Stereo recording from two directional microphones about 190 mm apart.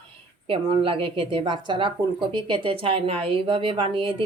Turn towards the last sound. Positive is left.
turn(degrees=-25)  # may be behind; listen again after turning